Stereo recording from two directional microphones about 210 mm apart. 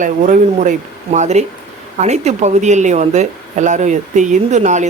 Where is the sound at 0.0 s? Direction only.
40° right (ahead or behind).